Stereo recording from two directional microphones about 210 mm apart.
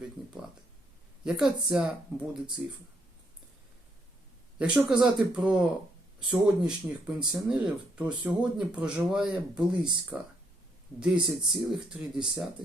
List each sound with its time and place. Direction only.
1.2 s speech: 5° right (ahead or behind)
4.5 s speech: 5° right (ahead or behind)